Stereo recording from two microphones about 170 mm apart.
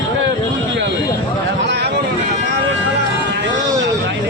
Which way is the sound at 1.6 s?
85° right.